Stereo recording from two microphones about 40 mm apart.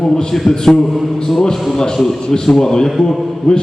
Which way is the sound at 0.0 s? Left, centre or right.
Centre.